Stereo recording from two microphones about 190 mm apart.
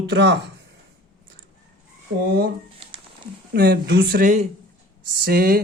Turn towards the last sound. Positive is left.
turn(degrees=-50)  # may be behind; listen again after turning